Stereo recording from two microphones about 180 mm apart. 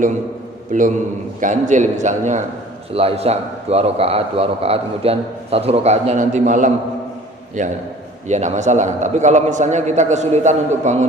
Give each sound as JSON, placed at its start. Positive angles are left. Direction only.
{"t": 0.7, "sound": "a man's voice", "side_deg": -45}